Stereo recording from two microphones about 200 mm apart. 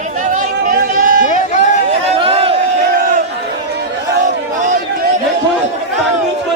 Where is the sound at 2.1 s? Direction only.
30° right (ahead or behind).